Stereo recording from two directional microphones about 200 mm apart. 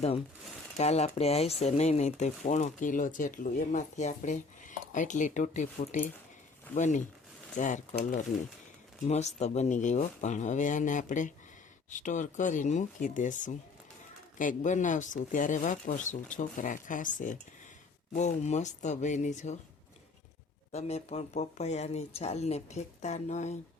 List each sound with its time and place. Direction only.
0.8 s speech: 30° left (ahead or behind)
20.7 s speech: 30° left (ahead or behind)